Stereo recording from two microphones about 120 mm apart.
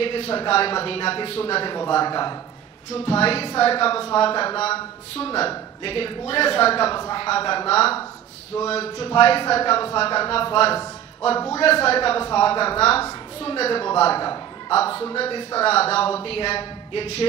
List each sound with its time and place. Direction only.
0.0 s a woman's voice: 50° left (ahead or behind)
2.9 s a woman's voice: 55° left (ahead or behind)
11.3 s a man's voice: 30° left (ahead or behind)
11.6 s a woman's voice: 55° left (ahead or behind)